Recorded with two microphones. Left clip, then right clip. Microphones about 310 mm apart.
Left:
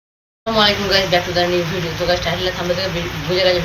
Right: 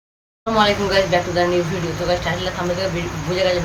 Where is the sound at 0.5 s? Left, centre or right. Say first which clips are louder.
Left 1 dB; centre.